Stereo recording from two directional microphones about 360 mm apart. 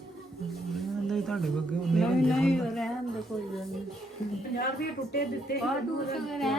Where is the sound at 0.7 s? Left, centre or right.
Centre.